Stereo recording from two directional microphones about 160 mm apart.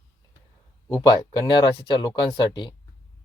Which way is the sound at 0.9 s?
25° left (ahead or behind).